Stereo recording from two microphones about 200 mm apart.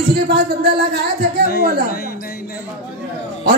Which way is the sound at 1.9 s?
50° left (ahead or behind).